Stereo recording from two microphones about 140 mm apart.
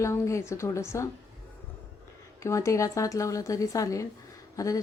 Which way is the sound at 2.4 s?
20° left (ahead or behind).